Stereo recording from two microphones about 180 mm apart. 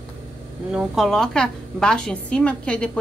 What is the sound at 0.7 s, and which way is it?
A woman's voice, centre (ahead or behind).